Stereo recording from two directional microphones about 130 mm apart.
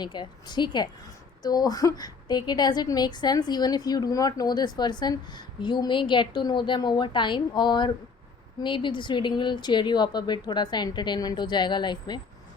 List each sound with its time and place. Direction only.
0.0 s a woman's voice: 35° left (ahead or behind)